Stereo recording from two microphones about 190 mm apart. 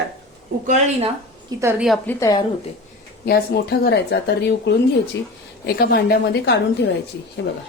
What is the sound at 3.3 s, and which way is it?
Speech, 55° left (ahead or behind).